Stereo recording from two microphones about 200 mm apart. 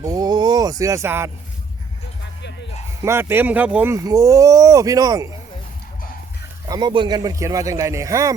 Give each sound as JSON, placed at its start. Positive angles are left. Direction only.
{"t": 0.0, "sound": "speech", "side_deg": -20}
{"t": 3.0, "sound": "speech", "side_deg": -10}
{"t": 6.7, "sound": "speech", "side_deg": -20}